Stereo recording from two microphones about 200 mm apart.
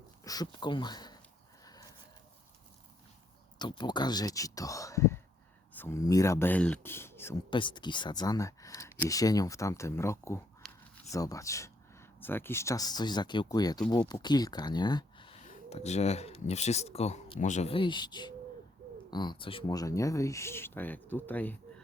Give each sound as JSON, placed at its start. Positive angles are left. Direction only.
{"t": 0.3, "sound": "speech", "side_deg": 20}
{"t": 1.6, "sound": "a sound", "side_deg": 20}
{"t": 3.6, "sound": "speech", "side_deg": 20}
{"t": 7.5, "sound": "speech", "side_deg": 25}
{"t": 10.6, "sound": "a sound", "side_deg": 0}
{"t": 11.1, "sound": "speech", "side_deg": 15}
{"t": 15.4, "sound": "speech", "side_deg": 35}